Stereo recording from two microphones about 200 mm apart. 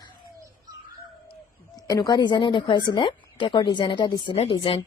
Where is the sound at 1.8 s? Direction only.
20° left (ahead or behind).